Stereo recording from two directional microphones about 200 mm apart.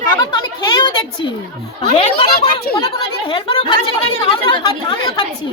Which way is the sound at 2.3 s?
50° left (ahead or behind).